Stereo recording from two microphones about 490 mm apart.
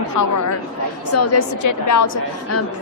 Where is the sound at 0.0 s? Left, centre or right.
Left.